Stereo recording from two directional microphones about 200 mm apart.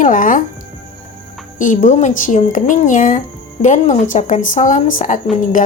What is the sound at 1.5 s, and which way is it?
Speech, 40° left (ahead or behind).